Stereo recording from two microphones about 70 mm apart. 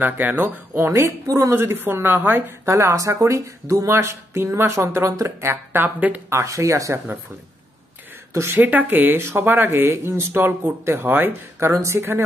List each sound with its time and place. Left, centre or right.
0.0 s speech: right
1.2 s a woman's voice: right
1.5 s speech: right
2.7 s speech: right
6.3 s speech: right
8.3 s a woman's voice: right
8.5 s speech: right
11.7 s speech: right